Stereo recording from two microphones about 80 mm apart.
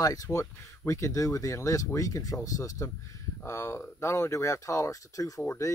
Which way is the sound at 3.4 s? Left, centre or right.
Left.